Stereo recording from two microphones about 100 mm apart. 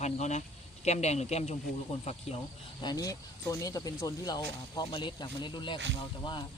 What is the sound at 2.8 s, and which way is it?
Speech, 40° left (ahead or behind).